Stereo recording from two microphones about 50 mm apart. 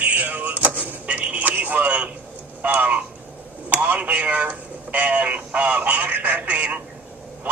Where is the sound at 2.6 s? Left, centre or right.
Right.